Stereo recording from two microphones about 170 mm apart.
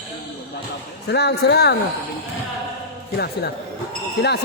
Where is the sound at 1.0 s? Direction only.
80° left.